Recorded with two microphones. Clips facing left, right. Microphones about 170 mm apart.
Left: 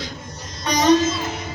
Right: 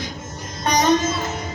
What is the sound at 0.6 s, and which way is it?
Music, 50° right (ahead or behind).